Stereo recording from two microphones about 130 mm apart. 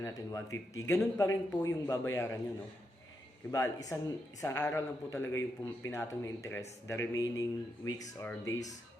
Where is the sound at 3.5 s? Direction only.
25° left (ahead or behind).